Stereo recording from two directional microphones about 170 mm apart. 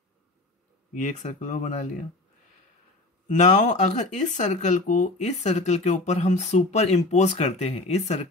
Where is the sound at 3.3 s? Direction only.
45° left (ahead or behind).